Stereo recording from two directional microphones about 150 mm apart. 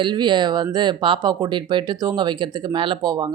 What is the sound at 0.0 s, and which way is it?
Speech, 30° right (ahead or behind).